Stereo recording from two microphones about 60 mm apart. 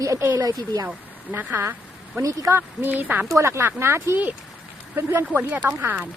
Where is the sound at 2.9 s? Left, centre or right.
Right.